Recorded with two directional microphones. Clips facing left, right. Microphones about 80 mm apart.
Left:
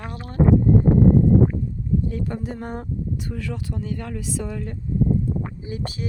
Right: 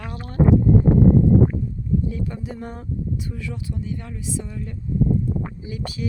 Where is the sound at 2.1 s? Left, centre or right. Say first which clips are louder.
Left 1 dB; left.